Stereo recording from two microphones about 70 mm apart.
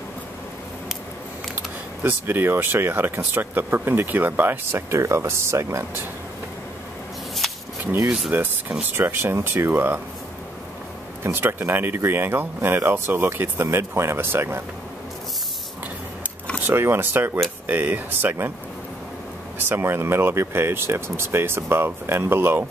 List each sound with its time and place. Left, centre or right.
2.0 s speech: right
7.4 s a sound: centre
8.0 s rub: centre
8.3 s a sound: right
8.8 s speech: right
11.3 s speech: right
16.6 s speech: right
19.6 s speech: right